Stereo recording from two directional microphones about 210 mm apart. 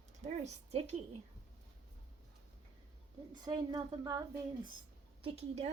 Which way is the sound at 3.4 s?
20° right (ahead or behind).